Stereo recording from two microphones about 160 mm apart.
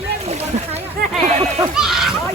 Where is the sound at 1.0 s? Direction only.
80° right.